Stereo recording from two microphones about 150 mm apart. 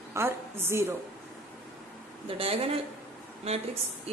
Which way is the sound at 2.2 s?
40° right (ahead or behind).